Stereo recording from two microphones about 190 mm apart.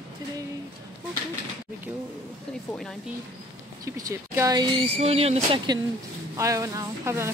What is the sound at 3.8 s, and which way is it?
Speech, 15° right (ahead or behind).